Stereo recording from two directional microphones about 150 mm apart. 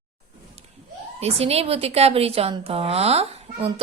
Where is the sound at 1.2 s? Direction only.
45° right (ahead or behind).